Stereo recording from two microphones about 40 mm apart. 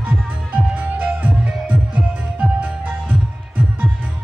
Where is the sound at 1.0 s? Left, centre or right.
Right.